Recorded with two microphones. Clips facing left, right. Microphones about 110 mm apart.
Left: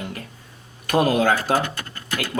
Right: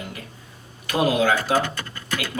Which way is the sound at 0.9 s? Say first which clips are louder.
Left 2 dB; 45° left (ahead or behind).